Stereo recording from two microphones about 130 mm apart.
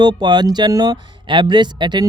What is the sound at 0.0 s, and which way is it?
Speech, 35° right (ahead or behind).